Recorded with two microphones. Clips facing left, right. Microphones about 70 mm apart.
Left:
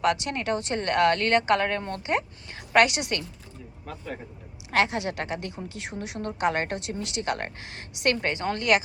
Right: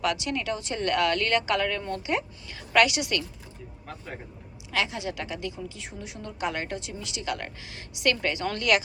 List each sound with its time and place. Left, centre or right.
0.0 s a woman's voice: left
4.7 s speech: left
5.6 s speech: left